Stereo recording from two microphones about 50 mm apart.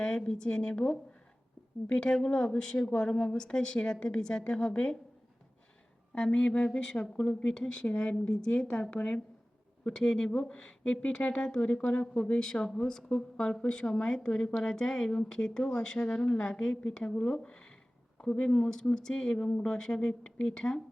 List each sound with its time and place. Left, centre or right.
0.3 s a woman's voice: centre
6.1 s a woman's voice: centre
16.4 s a woman's voice: centre